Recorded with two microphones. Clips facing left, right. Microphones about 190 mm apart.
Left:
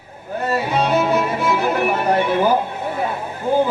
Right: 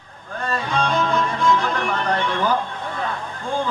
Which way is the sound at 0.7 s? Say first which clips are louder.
Left 3 dB; 10° left (ahead or behind).